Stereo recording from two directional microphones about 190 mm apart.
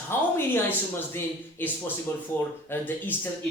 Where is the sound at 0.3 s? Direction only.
10° left (ahead or behind).